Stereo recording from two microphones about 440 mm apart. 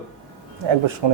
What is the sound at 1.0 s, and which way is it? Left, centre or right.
Speech, right.